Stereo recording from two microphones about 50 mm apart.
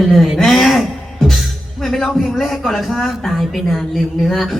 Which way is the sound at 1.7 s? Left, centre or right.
Centre.